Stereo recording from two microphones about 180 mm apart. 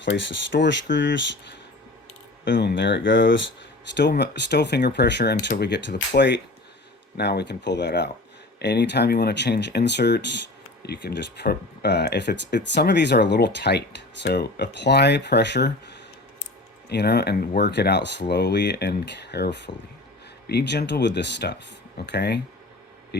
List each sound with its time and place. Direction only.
0.0 s speech: 80° left
2.4 s speech: 75° left (ahead or behind)
3.9 s speech: 70° left (ahead or behind)